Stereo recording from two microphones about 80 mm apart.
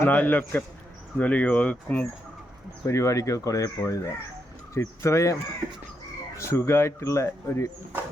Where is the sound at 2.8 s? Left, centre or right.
Left.